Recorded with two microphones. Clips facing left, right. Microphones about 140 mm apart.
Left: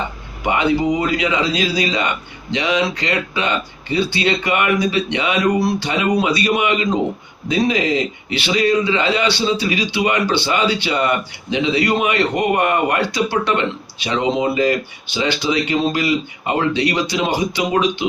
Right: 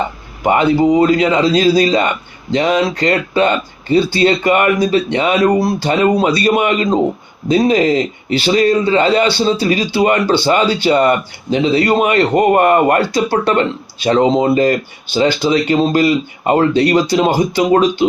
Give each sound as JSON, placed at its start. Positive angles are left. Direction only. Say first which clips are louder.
{"t": 0.4, "sound": "a man's voice", "louder": "right 5 dB", "side_deg": -40}